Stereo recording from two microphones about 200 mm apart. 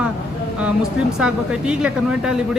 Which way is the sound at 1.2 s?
5° right (ahead or behind).